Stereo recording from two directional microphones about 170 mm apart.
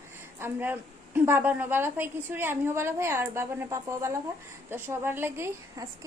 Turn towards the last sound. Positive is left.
turn(degrees=-15)  # may be behind; listen again after turning